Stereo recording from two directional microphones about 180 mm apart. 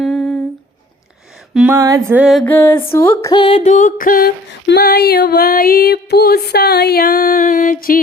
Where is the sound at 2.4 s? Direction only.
10° left (ahead or behind).